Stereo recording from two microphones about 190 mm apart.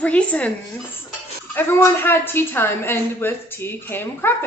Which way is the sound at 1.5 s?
10° left (ahead or behind).